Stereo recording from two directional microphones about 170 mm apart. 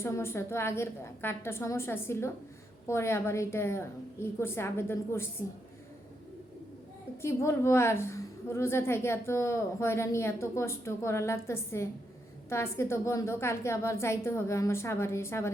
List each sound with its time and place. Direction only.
0.0 s a woman's voice: 15° left (ahead or behind)
7.2 s a woman's voice: 15° left (ahead or behind)